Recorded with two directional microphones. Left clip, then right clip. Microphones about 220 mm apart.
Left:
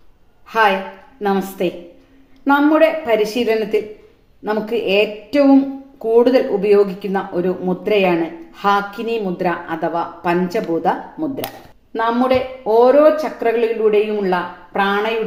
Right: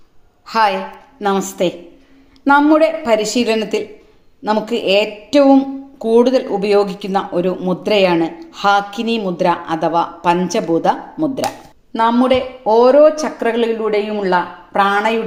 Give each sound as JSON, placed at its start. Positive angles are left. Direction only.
{"t": 0.4, "sound": "a woman's voice", "side_deg": -35}